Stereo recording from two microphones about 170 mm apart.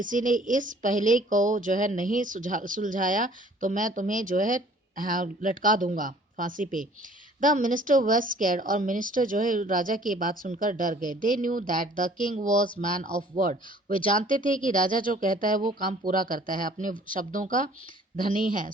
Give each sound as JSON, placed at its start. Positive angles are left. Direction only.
{"t": 0.0, "sound": "a woman's voice", "side_deg": -50}
{"t": 13.9, "sound": "speech", "side_deg": 30}
{"t": 14.2, "sound": "a woman's voice", "side_deg": -50}